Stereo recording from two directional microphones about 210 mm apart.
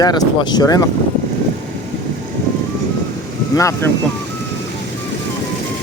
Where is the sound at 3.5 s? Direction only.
15° left (ahead or behind).